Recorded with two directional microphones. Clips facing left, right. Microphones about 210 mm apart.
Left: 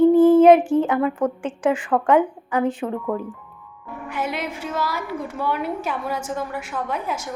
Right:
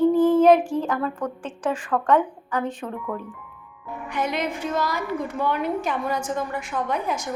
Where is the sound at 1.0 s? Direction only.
25° left (ahead or behind).